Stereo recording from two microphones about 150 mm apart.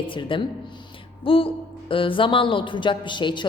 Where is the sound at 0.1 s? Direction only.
35° left (ahead or behind).